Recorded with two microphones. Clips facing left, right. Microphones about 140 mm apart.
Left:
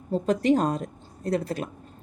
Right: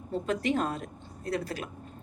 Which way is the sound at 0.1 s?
35° left (ahead or behind).